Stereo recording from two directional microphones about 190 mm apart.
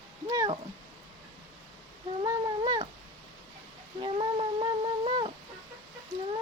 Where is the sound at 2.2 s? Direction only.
25° right (ahead or behind).